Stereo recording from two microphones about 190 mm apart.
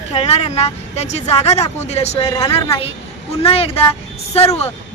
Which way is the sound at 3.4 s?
30° left (ahead or behind).